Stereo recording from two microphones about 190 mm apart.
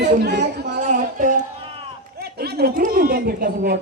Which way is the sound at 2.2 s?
55° right (ahead or behind).